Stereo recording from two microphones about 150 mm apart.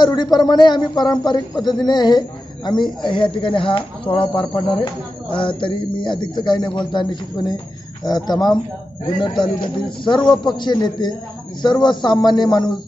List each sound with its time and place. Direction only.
0.0 s a man's voice: 30° left (ahead or behind)